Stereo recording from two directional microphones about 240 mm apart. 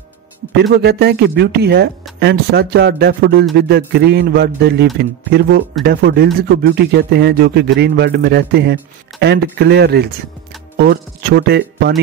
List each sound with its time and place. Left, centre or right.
0.6 s speech: right